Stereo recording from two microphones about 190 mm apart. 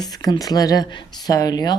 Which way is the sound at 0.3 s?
20° left (ahead or behind).